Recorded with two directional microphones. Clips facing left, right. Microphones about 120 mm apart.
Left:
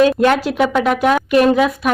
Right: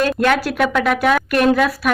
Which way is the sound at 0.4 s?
20° left (ahead or behind).